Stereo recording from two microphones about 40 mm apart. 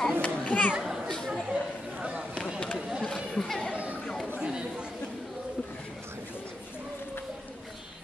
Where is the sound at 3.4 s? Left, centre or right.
Centre.